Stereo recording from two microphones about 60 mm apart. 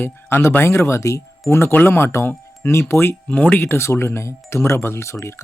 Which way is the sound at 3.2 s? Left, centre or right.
Left.